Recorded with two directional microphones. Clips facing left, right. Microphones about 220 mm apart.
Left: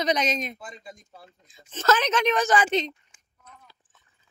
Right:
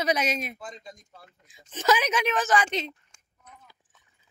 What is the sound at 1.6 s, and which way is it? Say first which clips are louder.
Speech: left 1 dB; 15° right (ahead or behind).